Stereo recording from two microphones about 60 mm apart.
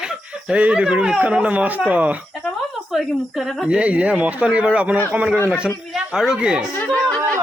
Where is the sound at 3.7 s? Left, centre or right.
Right.